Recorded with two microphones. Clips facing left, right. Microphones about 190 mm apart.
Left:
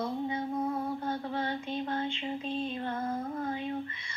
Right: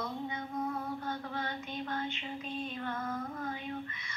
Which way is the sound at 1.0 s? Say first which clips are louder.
Left 5 dB; 30° left (ahead or behind).